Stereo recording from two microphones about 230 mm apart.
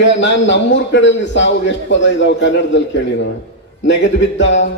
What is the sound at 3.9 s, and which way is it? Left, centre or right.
Speech, left.